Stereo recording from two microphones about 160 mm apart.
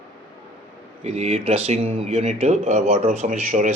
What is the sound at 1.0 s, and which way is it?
Speech, 45° right (ahead or behind).